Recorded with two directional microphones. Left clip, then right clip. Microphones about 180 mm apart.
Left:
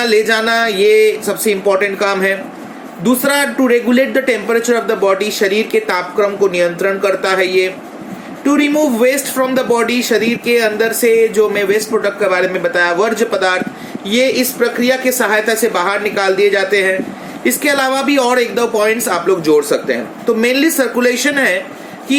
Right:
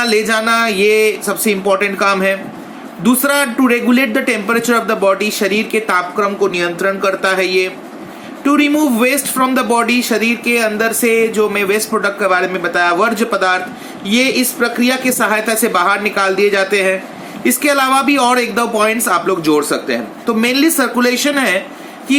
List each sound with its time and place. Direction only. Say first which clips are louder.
0.0 s a man's voice: left 1 dB; 55° right (ahead or behind)